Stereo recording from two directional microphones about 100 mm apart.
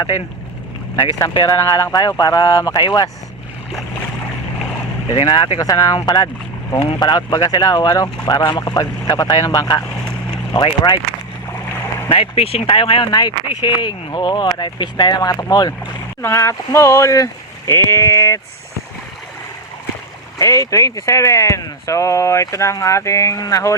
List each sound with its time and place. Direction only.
1.5 s speech: 35° left (ahead or behind)
5.1 s speech: 55° left (ahead or behind)
5.5 s speech: 40° left (ahead or behind)
12.0 s speech: 75° left (ahead or behind); by 15.7 s 40° left (ahead or behind)
16.2 s speech: 30° left (ahead or behind)
20.4 s speech: 35° left (ahead or behind)